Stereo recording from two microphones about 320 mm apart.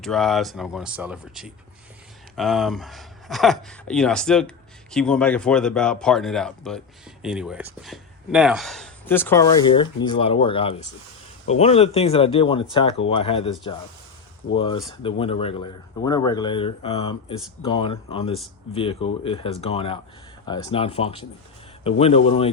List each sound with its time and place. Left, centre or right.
0.0 s speech: centre